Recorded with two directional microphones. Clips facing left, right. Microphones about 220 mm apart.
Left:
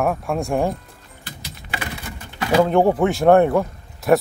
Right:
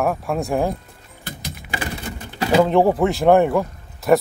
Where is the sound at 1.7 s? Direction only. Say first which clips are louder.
Right 2 dB; 30° right (ahead or behind).